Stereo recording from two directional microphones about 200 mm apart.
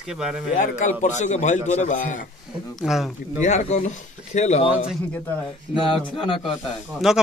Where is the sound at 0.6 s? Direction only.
40° left (ahead or behind).